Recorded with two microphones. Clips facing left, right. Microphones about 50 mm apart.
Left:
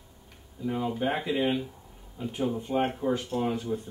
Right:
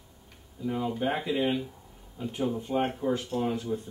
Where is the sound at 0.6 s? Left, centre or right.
Centre.